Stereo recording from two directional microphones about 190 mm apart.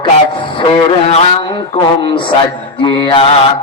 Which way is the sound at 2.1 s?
25° left (ahead or behind).